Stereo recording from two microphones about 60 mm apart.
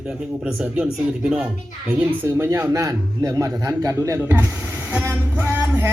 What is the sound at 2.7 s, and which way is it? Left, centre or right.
A man's voice, right.